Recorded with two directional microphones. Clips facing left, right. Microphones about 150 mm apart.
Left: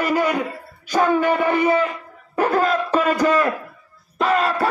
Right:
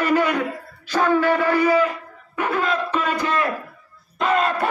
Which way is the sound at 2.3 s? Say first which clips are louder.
Left 4 dB; 40° left (ahead or behind).